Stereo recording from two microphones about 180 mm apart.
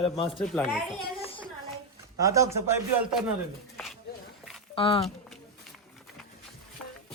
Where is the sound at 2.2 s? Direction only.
15° right (ahead or behind).